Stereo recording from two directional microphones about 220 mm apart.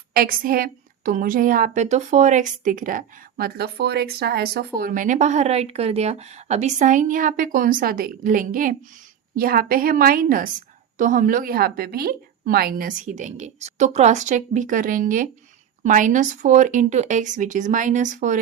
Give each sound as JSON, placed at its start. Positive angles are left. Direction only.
{"t": 0.1, "sound": "a woman's voice", "side_deg": -40}